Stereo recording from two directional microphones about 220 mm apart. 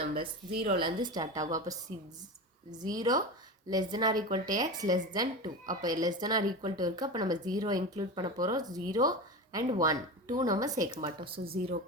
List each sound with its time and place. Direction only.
0.6 s a woman's voice: 25° right (ahead or behind)